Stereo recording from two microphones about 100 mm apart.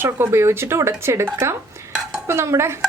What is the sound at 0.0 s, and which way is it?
A woman's voice, 25° right (ahead or behind).